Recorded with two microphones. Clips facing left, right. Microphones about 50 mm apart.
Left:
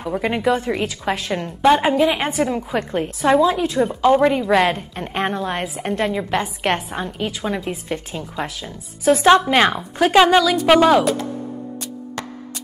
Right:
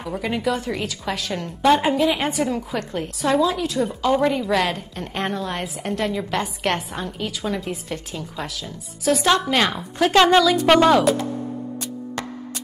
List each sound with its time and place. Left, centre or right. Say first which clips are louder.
0.0 s a woman's voice: left 4 dB; centre
9.7 s speech: left 3 dB; centre